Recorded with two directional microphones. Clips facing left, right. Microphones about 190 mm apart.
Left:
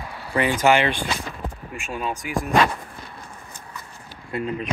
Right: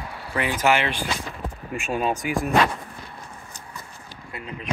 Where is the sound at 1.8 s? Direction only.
20° right (ahead or behind).